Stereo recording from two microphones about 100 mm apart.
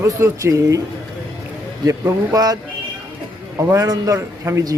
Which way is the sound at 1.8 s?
35° right (ahead or behind).